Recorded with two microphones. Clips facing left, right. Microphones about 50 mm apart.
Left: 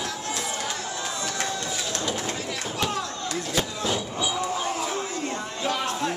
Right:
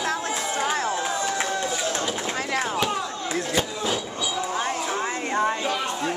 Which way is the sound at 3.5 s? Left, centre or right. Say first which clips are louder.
Left 1 dB; centre.